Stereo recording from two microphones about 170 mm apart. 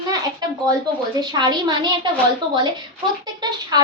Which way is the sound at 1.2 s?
25° right (ahead or behind).